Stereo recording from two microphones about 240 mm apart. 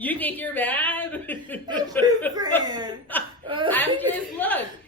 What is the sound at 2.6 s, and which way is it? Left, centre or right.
Speech, centre.